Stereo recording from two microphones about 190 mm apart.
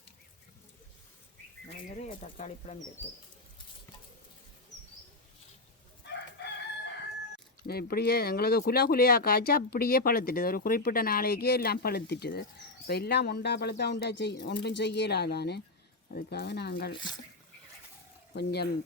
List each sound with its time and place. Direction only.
1.6 s speech: 35° left (ahead or behind)
6.0 s chicken: 65° left (ahead or behind)
7.7 s speech: 55° left (ahead or behind)
18.3 s speech: 60° left (ahead or behind)